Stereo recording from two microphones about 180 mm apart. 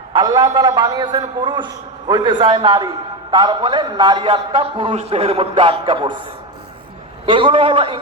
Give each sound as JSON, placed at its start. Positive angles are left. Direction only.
{"t": 0.1, "sound": "a man's voice", "side_deg": -25}
{"t": 7.3, "sound": "a man's voice", "side_deg": -30}